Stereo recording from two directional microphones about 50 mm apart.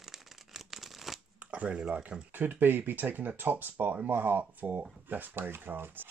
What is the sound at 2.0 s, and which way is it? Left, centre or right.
Speech, right.